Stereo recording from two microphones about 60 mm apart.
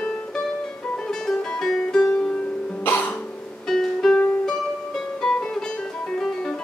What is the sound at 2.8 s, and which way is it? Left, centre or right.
Music, left.